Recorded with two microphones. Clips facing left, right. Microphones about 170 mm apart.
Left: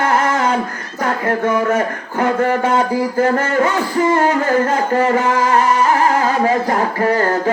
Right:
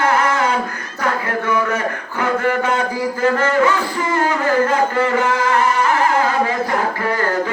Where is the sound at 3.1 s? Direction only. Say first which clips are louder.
Even; 45° left (ahead or behind).